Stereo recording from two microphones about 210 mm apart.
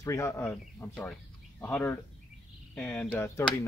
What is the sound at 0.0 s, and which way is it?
Speech, 15° left (ahead or behind).